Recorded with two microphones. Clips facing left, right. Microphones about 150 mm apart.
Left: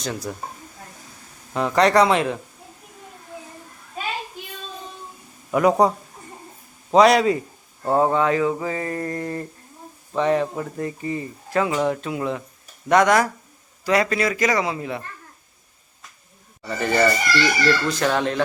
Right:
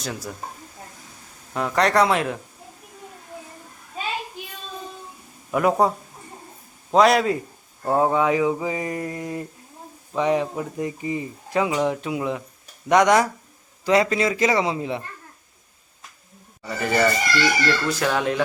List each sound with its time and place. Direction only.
0.0 s speech: 5° right (ahead or behind)
1.5 s speech: centre (ahead or behind)
5.5 s speech: centre (ahead or behind)
6.9 s a man's voice: centre (ahead or behind); by 15.0 s 20° right (ahead or behind)
16.6 s speech: centre (ahead or behind)